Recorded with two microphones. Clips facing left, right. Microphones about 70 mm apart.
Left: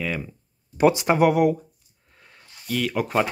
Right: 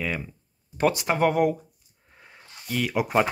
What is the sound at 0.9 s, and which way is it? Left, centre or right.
Speech, left.